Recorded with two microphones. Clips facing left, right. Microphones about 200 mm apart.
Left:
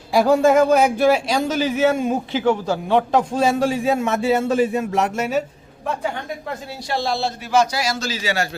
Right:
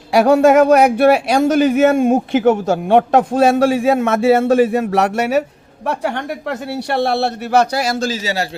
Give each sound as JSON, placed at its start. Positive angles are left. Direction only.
{"t": 0.1, "sound": "speech", "side_deg": -70}